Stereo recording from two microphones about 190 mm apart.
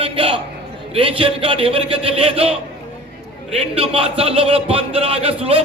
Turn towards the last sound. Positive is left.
turn(degrees=-30)  # may be behind; listen again after turning